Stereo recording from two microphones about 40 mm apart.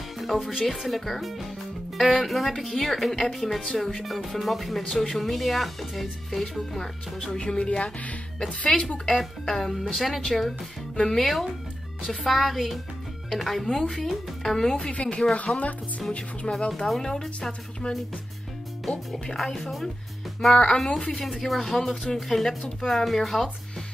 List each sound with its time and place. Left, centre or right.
0.2 s music: centre
0.7 s speech: centre
7.3 s speech: left
8.5 s speech: left
9.5 s speech: centre
14.8 s speech: left
16.7 s speech: centre
17.4 s speech: left
18.9 s speech: centre